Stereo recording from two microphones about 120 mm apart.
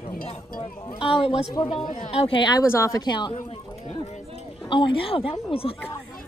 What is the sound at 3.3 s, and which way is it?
Speech, 65° left (ahead or behind).